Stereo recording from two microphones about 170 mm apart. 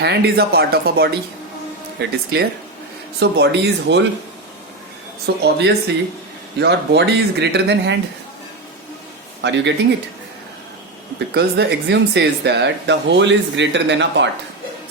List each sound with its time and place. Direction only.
0.0 s speech: 75° right (ahead or behind)
3.2 s speech: 85° right
5.2 s speech: 75° right (ahead or behind)
9.4 s speech: 90° right
11.3 s speech: 80° right